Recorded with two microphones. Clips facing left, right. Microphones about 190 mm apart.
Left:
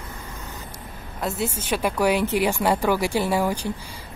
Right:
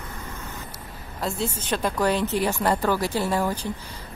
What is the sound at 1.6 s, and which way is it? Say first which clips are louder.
Speech: left 2 dB; 10° left (ahead or behind).